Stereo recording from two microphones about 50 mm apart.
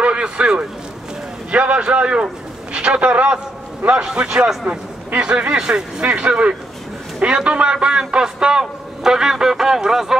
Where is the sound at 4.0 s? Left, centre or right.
Centre.